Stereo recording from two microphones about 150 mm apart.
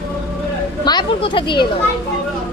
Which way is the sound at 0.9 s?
30° left (ahead or behind).